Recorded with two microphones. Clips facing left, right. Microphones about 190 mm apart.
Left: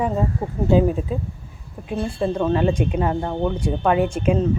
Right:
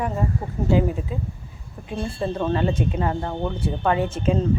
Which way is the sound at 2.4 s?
15° left (ahead or behind).